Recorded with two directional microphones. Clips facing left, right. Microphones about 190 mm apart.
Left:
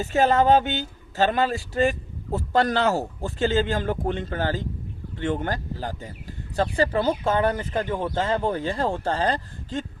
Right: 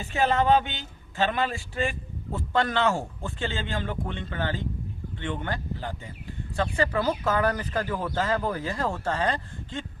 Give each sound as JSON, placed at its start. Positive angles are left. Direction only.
{"t": 0.0, "sound": "speech", "side_deg": 40}